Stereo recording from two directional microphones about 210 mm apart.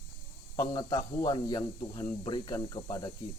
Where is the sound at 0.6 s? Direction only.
20° left (ahead or behind).